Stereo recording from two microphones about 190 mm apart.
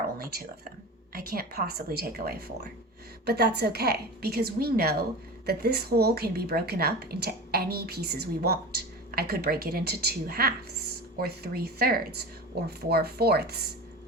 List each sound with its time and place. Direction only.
0.2 s a woman's voice: 50° right (ahead or behind)